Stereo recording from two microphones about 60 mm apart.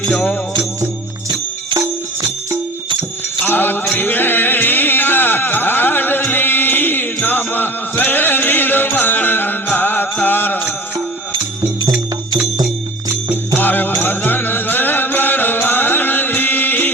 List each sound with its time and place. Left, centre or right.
3.4 s music: left
13.6 s music: left